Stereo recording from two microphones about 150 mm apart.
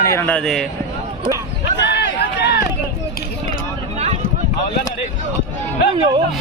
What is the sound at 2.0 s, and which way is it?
Run, 90° left.